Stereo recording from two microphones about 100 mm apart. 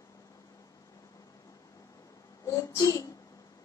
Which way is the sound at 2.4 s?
30° left (ahead or behind).